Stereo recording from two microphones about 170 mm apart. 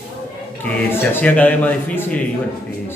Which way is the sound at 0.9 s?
10° left (ahead or behind).